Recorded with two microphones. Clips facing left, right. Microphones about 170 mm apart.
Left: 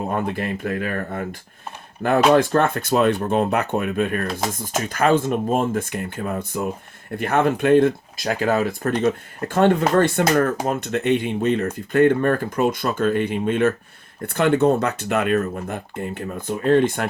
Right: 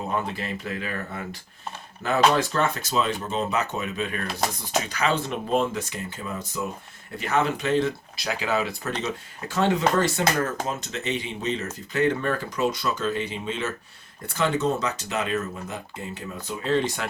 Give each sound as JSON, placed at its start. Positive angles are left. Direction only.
{"t": 0.1, "sound": "speech", "side_deg": 50}